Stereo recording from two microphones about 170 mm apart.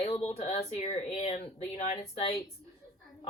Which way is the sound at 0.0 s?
35° left (ahead or behind).